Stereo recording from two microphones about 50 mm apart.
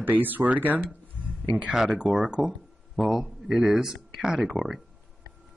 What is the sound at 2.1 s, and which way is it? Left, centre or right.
Speech, centre.